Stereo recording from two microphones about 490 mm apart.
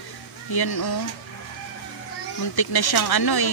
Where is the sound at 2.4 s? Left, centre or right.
Left.